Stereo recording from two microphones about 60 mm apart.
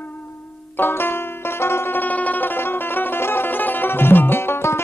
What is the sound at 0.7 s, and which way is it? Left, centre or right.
Banjo, left.